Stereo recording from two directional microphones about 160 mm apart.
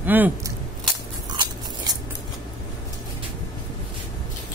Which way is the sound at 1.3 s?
25° right (ahead or behind).